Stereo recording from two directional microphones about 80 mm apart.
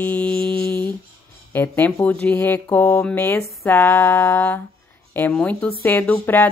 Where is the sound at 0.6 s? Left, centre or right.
Left.